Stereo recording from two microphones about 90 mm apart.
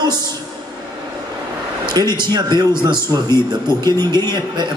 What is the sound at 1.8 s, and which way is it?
A man's voice, 50° right (ahead or behind).